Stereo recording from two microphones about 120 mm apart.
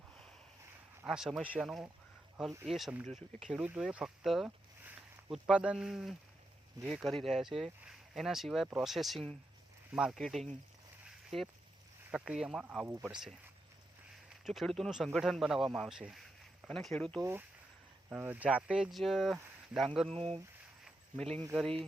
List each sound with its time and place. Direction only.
1.0 s speech: 5° right (ahead or behind)
11.0 s a sound: centre (ahead or behind)
12.1 s speech: 5° right (ahead or behind)
14.4 s speech: centre (ahead or behind)
16.6 s speech: 5° left (ahead or behind)
18.1 s speech: 15° right (ahead or behind)
20.8 s a sound: 5° left (ahead or behind)